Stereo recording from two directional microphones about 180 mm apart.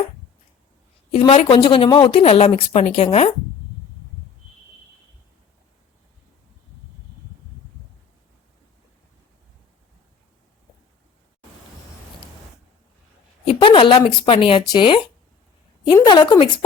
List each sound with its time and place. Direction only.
1.2 s a woman's voice: 30° left (ahead or behind)
13.4 s a woman's voice: 30° left (ahead or behind)